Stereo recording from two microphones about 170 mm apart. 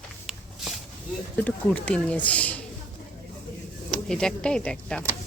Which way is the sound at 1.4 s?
10° left (ahead or behind).